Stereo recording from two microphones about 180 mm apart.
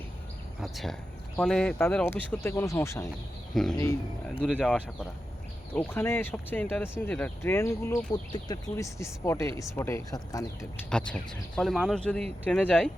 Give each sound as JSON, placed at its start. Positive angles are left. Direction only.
{"t": 0.6, "sound": "speech", "side_deg": 0}
{"t": 3.5, "sound": "speech", "side_deg": 0}
{"t": 5.7, "sound": "speech", "side_deg": 15}
{"t": 10.8, "sound": "speech", "side_deg": 5}